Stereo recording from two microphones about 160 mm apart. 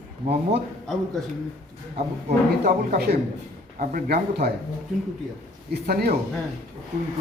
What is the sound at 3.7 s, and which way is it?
Speech, 70° right (ahead or behind).